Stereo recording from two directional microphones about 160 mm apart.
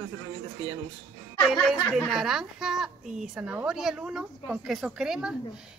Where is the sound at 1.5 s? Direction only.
Centre (ahead or behind).